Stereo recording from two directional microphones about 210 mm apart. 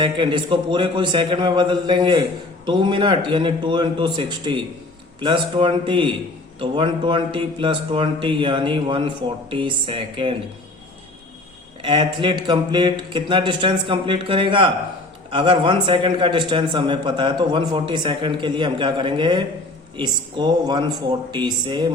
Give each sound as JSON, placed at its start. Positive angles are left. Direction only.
{"t": 0.0, "sound": "a man's voice", "side_deg": -25}
{"t": 11.8, "sound": "a man's voice", "side_deg": -20}